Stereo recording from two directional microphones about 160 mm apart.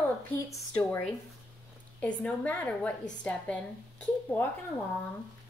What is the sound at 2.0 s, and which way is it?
A woman's voice, 10° left (ahead or behind).